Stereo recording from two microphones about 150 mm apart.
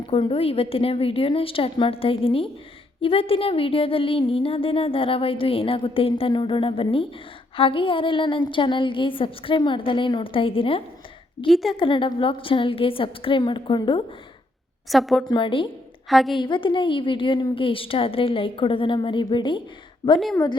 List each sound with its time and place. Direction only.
0.1 s a woman's voice: 40° left (ahead or behind)
11.4 s a woman's voice: centre (ahead or behind)
11.8 s a woman's voice: 35° left (ahead or behind)
14.8 s a woman's voice: centre (ahead or behind)
15.3 s a woman's voice: 35° left (ahead or behind)
16.0 s a woman's voice: centre (ahead or behind)
16.4 s a woman's voice: 35° left (ahead or behind)